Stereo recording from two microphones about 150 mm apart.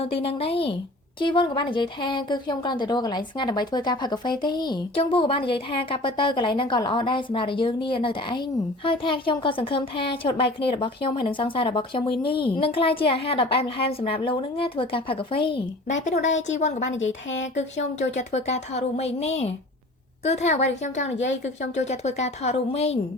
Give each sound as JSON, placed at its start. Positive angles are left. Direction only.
{"t": 0.0, "sound": "speech", "side_deg": 40}
{"t": 15.9, "sound": "a woman's voice", "side_deg": 55}